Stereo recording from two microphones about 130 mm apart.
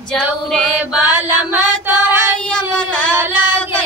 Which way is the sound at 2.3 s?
10° left (ahead or behind).